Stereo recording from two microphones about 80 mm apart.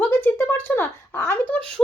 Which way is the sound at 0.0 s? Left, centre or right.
Left.